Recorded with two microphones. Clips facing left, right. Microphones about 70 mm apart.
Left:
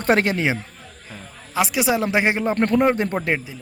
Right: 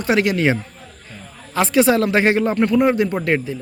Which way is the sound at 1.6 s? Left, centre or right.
Centre.